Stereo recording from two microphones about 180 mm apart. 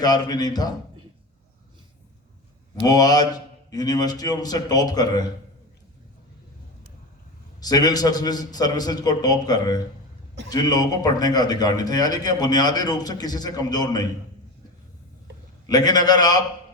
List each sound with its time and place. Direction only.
0.0 s a man's voice: 20° left (ahead or behind)
2.8 s a man's voice: 20° left (ahead or behind)
7.6 s a man's voice: 20° left (ahead or behind)
15.6 s a man's voice: 20° left (ahead or behind)